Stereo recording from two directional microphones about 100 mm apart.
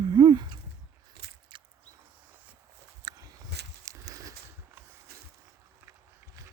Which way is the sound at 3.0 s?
40° right (ahead or behind).